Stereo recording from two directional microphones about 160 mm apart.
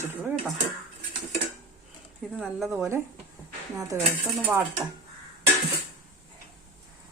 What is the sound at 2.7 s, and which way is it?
Speech, 15° right (ahead or behind).